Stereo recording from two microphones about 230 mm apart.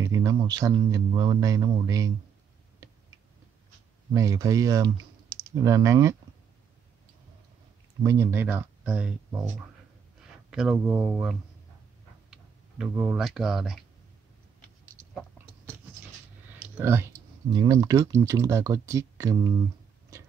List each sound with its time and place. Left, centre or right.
0.0 s speech: centre
4.1 s speech: centre
8.0 s speech: centre
10.5 s speech: centre
16.7 s speech: centre